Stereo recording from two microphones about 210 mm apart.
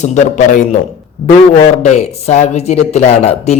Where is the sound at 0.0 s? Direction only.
35° left (ahead or behind).